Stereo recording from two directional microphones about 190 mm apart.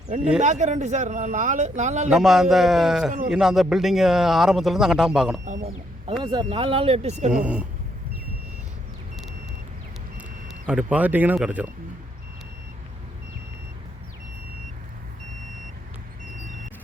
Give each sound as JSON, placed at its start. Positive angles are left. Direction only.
{"t": 0.4, "sound": "speech", "side_deg": -40}
{"t": 2.0, "sound": "speech", "side_deg": 0}
{"t": 5.6, "sound": "speech", "side_deg": -30}
{"t": 7.3, "sound": "speech", "side_deg": -5}
{"t": 10.2, "sound": "speech", "side_deg": -5}